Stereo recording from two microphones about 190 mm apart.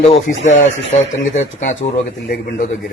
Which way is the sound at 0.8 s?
80° left.